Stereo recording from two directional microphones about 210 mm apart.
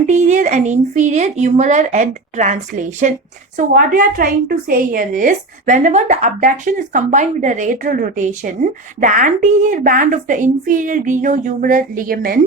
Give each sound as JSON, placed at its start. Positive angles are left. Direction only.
{"t": 0.1, "sound": "a woman's voice", "side_deg": -35}